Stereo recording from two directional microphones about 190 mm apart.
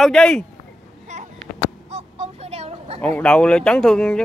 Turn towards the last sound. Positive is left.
turn(degrees=5)  # may be behind; listen again after turning